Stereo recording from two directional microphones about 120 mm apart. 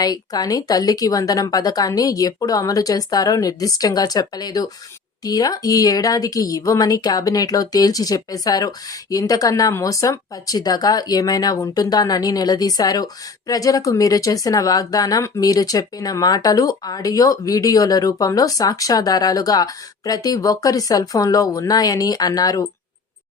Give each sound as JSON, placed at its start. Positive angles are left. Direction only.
{"t": 0.0, "sound": "speech", "side_deg": 30}